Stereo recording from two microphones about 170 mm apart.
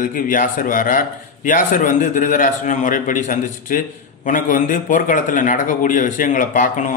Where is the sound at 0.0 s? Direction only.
55° left (ahead or behind).